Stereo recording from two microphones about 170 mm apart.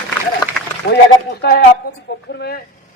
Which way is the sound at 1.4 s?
70° left (ahead or behind).